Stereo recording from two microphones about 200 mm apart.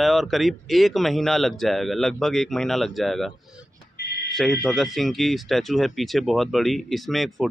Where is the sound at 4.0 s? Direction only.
55° left (ahead or behind).